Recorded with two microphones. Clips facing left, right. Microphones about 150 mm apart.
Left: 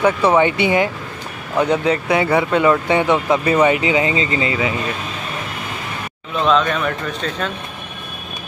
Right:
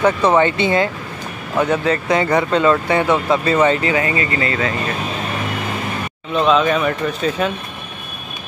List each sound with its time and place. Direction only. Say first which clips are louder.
0.0 s speech: even; 10° left (ahead or behind)
6.3 s speech: right 2 dB; 5° right (ahead or behind)